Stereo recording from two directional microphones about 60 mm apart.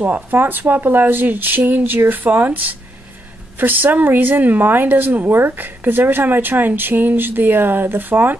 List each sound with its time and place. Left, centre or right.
0.0 s speech: right